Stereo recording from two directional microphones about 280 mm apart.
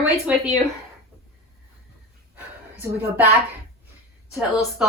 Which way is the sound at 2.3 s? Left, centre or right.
Centre.